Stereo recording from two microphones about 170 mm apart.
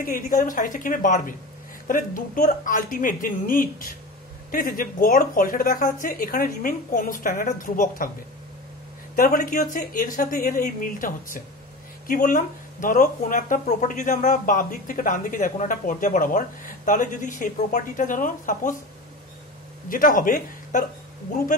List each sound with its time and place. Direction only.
0.0 s a woman's voice: 50° left (ahead or behind)
9.1 s a woman's voice: 55° left (ahead or behind)
19.9 s speech: 55° left (ahead or behind)